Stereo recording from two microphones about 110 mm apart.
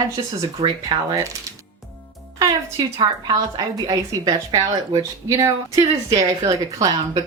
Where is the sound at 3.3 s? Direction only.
35° right (ahead or behind).